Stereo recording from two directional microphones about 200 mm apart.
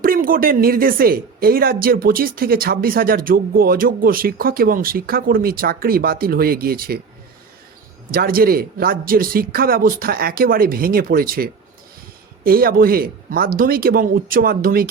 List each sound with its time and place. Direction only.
0.0 s speech: 45° right (ahead or behind)
8.1 s speech: 50° right (ahead or behind)